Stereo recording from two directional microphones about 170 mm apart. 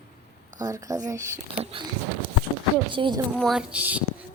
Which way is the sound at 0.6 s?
20° right (ahead or behind).